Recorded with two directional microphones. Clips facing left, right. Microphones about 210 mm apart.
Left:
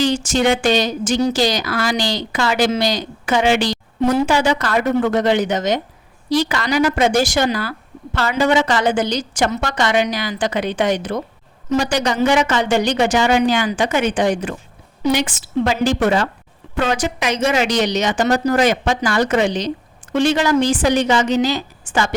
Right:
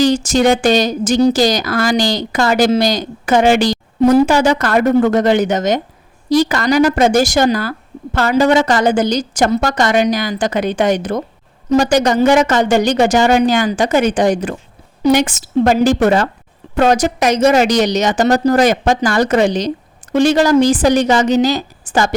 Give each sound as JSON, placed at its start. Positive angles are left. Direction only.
{"t": 0.0, "sound": "a woman's voice", "side_deg": -40}